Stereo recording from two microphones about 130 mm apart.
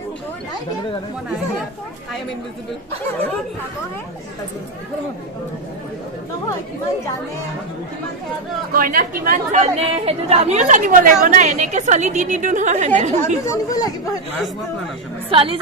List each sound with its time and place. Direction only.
8.7 s speech: 90° right; by 13.1 s 65° right (ahead or behind)
13.5 s speech: 30° left (ahead or behind)
15.2 s a woman's voice: 45° right (ahead or behind)